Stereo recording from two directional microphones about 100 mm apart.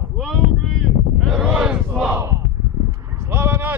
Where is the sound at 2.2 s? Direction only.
30° right (ahead or behind).